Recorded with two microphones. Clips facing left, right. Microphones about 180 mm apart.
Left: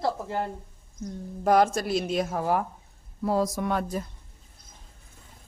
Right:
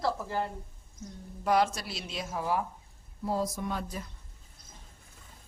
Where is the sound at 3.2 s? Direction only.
80° left.